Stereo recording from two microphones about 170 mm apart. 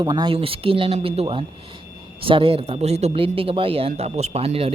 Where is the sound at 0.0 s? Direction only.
25° right (ahead or behind).